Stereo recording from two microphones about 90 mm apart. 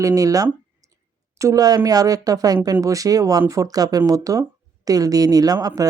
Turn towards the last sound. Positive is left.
turn(degrees=-45)  # may be behind; listen again after turning